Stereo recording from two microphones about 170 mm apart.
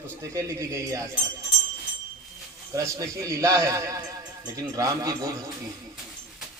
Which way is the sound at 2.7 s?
20° right (ahead or behind).